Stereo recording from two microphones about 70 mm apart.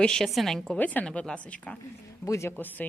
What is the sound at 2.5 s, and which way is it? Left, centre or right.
Speech, left.